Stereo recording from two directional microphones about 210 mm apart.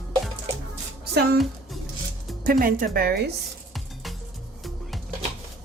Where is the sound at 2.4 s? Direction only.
40° right (ahead or behind).